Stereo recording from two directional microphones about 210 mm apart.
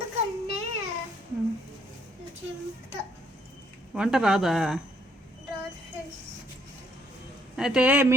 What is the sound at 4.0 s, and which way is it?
Speech, 5° right (ahead or behind).